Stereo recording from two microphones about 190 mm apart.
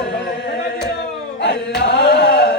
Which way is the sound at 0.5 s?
60° left (ahead or behind).